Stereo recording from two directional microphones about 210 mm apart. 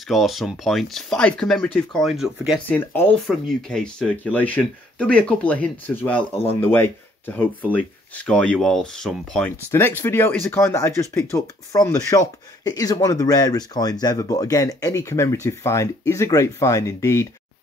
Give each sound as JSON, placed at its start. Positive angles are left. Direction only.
{"t": 0.1, "sound": "speech", "side_deg": 0}